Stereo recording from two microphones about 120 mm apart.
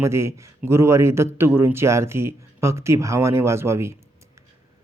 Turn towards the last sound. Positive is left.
turn(degrees=-20)  # may be behind; listen again after turning